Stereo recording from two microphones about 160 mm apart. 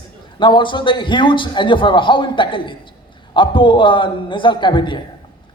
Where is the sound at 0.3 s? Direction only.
30° left (ahead or behind).